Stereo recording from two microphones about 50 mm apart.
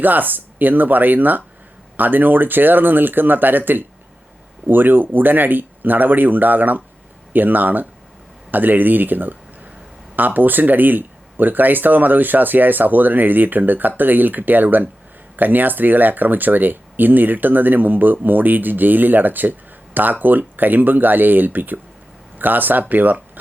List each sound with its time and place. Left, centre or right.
0.0 s speech: right